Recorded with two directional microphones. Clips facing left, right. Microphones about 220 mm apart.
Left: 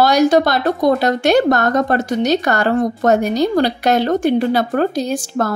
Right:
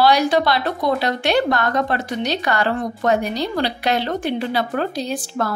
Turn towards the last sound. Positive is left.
turn(degrees=45)  # may be behind; listen again after turning